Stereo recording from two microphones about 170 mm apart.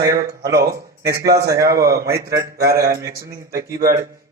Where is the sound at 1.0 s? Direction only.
70° right (ahead or behind).